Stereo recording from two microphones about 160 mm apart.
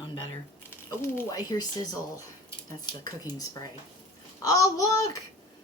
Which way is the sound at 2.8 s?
25° left (ahead or behind).